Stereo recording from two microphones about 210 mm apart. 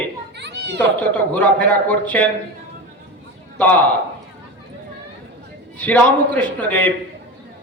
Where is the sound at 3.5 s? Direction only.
5° left (ahead or behind).